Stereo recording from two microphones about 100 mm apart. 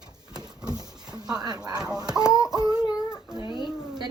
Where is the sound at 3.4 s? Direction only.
50° left (ahead or behind).